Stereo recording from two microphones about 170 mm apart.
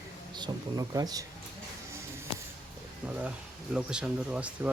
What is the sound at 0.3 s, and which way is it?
Speech, 25° right (ahead or behind).